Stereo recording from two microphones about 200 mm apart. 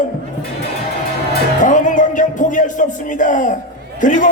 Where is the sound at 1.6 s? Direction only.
40° left (ahead or behind).